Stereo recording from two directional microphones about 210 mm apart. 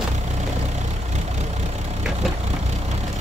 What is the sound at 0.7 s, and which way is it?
Vehicle, 35° right (ahead or behind).